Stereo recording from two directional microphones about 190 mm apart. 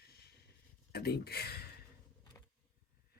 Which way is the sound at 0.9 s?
55° left (ahead or behind).